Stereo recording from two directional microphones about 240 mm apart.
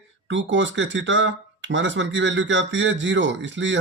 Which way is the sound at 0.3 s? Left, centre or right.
Right.